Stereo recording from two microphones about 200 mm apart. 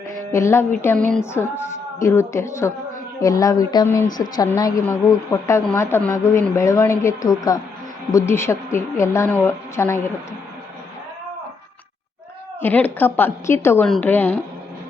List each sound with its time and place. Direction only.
0.3 s a woman's voice: 15° left (ahead or behind)
12.6 s a woman's voice: 10° left (ahead or behind)